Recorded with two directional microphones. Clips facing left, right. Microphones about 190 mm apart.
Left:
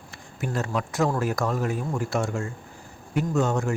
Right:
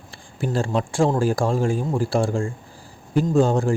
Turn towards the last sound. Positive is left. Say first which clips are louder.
# right 6 dB
turn(degrees=-30)  # may be behind; listen again after turning